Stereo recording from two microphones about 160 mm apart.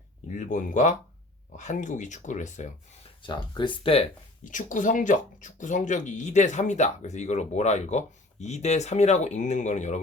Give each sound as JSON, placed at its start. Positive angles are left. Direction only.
{"t": 0.3, "sound": "speech", "side_deg": 50}
{"t": 3.2, "sound": "speech", "side_deg": 30}
{"t": 4.5, "sound": "speech", "side_deg": 55}